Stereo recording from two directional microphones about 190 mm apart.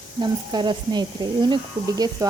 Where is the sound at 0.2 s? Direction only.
25° right (ahead or behind).